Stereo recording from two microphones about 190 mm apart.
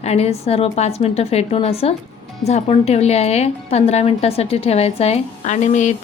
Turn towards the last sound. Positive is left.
turn(degrees=40)  # may be behind; listen again after turning